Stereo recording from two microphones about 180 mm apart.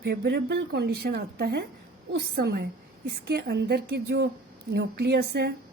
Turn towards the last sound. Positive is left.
turn(degrees=-65)  # may be behind; listen again after turning